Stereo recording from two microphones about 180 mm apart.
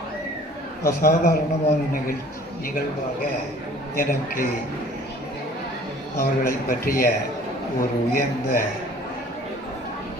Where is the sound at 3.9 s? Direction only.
55° left (ahead or behind).